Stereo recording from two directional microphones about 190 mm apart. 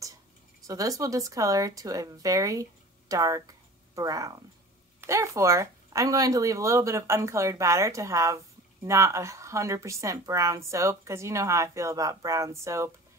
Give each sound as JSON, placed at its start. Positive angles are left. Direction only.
{"t": 0.7, "sound": "speech", "side_deg": -15}